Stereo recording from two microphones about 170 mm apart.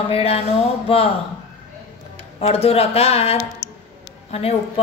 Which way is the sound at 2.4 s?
35° left (ahead or behind).